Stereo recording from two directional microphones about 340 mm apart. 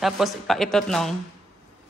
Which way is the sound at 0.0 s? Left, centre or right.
Centre.